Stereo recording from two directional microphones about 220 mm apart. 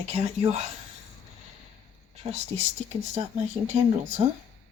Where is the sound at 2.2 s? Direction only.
30° right (ahead or behind).